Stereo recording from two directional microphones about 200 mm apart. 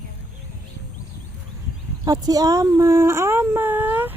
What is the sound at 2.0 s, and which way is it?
Speech, 20° right (ahead or behind).